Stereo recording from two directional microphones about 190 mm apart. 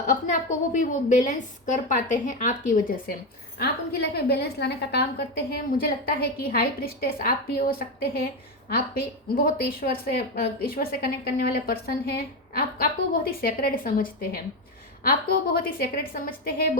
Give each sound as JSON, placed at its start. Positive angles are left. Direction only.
{"t": 0.1, "sound": "a woman's voice", "side_deg": 40}